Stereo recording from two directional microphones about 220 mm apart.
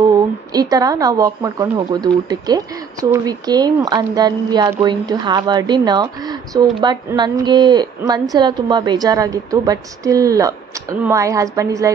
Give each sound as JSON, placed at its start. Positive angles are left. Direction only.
{"t": 0.5, "sound": "speech", "side_deg": -15}